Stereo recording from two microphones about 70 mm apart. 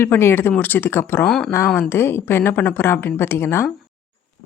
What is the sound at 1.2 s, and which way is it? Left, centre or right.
Speech, centre.